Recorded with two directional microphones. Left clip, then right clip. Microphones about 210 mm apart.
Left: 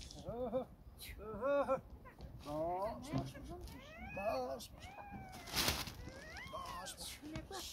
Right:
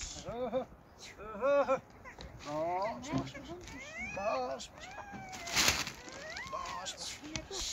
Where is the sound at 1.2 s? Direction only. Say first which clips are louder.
Right 7 dB; 5° right (ahead or behind).